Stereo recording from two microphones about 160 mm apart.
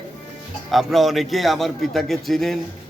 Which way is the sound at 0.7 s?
Centre (ahead or behind).